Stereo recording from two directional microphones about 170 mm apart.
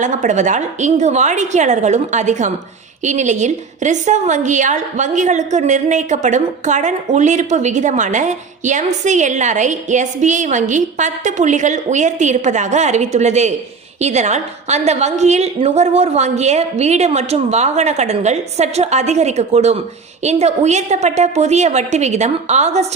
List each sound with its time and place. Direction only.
0.0 s a woman's voice: 45° right (ahead or behind)